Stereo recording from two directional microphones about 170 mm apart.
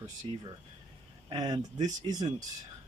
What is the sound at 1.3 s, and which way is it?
Speech, 25° right (ahead or behind).